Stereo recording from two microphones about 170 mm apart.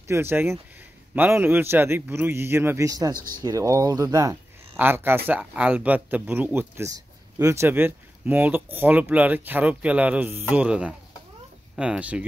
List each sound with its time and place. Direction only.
0.1 s speech: 10° right (ahead or behind)